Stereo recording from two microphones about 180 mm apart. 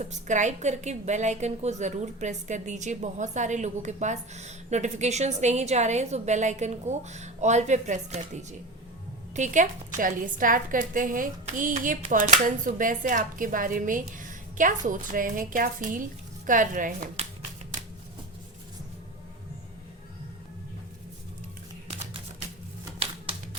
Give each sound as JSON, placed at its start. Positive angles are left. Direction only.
{"t": 0.0, "sound": "a woman's voice", "side_deg": -40}